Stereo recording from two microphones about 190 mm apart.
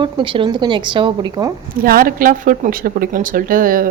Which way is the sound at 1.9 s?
50° right (ahead or behind).